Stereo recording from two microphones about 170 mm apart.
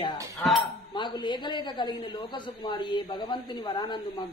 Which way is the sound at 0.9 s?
25° left (ahead or behind).